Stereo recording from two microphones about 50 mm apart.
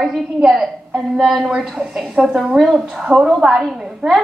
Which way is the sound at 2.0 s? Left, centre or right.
Right.